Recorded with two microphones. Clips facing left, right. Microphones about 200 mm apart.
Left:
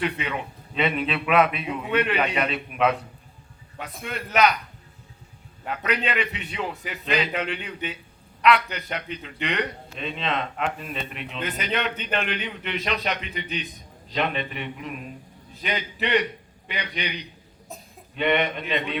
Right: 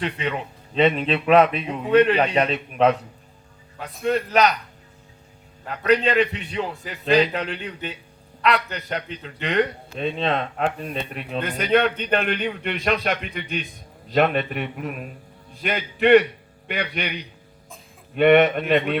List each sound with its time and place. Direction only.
0.0 s speech: 35° right (ahead or behind)
5.6 s a man's voice: 35° right (ahead or behind)
16.0 s a man's voice: 55° right (ahead or behind)
18.1 s a man's voice: 55° right (ahead or behind)